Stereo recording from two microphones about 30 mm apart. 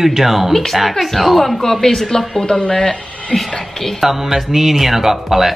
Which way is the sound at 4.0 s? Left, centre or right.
Centre.